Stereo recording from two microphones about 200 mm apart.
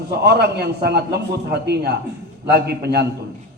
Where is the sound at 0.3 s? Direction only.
55° right (ahead or behind).